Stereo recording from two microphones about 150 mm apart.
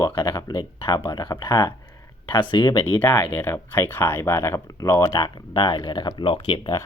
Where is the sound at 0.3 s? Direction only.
30° left (ahead or behind).